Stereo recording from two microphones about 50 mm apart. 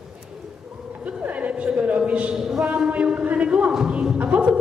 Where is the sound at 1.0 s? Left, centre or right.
Right.